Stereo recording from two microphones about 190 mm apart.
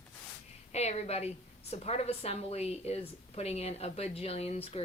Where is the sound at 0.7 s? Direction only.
35° left (ahead or behind).